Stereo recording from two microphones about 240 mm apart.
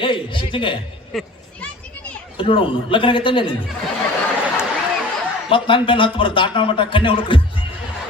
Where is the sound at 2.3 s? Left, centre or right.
Left.